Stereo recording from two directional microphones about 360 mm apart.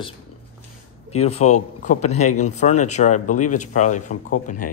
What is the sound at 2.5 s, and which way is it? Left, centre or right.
Speech, centre.